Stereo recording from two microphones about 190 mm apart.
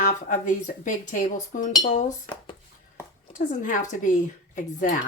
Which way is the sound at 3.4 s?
40° left (ahead or behind).